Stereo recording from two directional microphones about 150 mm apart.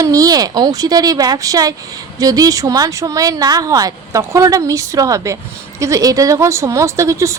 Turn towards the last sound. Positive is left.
turn(degrees=-20)  # may be behind; listen again after turning